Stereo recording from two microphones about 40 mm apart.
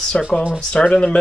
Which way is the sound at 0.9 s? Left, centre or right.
Left.